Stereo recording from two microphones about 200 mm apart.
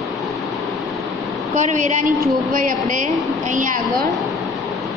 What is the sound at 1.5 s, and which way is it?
Speech, 35° right (ahead or behind).